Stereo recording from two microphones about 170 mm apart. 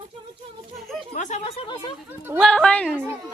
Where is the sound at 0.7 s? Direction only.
Centre (ahead or behind).